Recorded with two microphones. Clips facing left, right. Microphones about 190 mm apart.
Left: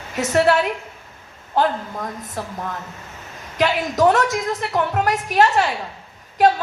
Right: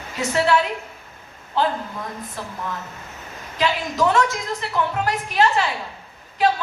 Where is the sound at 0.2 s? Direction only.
50° left (ahead or behind).